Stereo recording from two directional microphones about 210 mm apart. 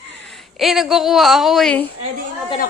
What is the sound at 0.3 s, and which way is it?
Speech, centre (ahead or behind).